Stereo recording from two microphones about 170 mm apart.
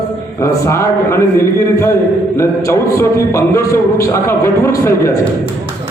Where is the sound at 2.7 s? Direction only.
15° left (ahead or behind).